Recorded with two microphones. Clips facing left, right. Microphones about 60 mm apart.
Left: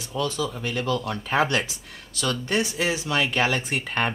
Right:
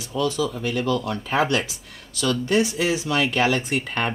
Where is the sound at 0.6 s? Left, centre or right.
Left.